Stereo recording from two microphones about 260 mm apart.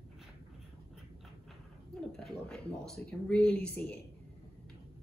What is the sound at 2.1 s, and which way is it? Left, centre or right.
A woman's voice, centre.